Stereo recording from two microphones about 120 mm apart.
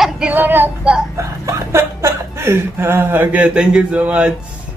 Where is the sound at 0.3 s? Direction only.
15° right (ahead or behind).